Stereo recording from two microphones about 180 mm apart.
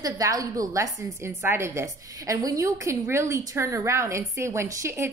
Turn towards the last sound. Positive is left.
turn(degrees=-15)  # may be behind; listen again after turning